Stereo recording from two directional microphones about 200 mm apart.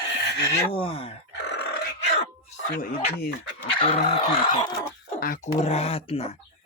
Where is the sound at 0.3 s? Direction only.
60° left (ahead or behind).